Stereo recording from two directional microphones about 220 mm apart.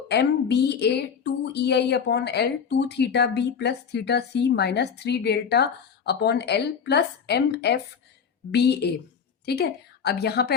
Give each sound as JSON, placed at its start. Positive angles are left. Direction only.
{"t": 0.1, "sound": "a woman's voice", "side_deg": 50}